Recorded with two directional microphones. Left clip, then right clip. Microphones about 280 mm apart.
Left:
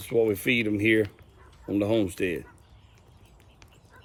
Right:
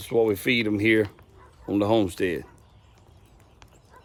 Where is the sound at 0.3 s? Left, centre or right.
Centre.